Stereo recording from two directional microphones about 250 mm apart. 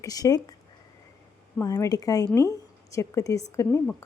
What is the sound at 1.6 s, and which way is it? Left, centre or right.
A woman's voice, centre.